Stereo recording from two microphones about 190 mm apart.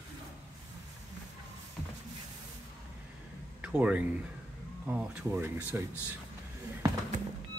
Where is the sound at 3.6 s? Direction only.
5° right (ahead or behind).